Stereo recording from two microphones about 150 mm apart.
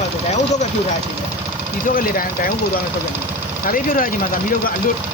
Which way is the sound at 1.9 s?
70° left (ahead or behind).